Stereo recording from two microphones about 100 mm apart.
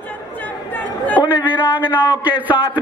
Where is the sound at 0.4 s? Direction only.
15° left (ahead or behind).